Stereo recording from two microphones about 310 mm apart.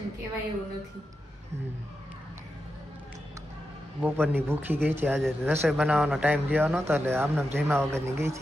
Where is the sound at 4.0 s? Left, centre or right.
Centre.